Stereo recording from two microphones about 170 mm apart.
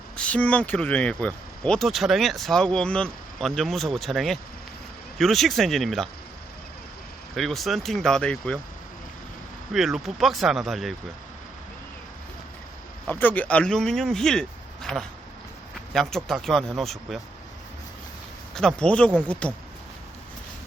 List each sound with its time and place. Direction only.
0.2 s speech: 10° left (ahead or behind)
7.3 s speech: centre (ahead or behind)
9.7 s speech: centre (ahead or behind)
13.1 s speech: 10° left (ahead or behind)
18.5 s speech: 5° left (ahead or behind)